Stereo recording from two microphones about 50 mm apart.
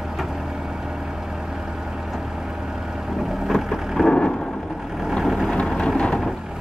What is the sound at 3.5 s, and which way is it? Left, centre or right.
Vehicle, centre.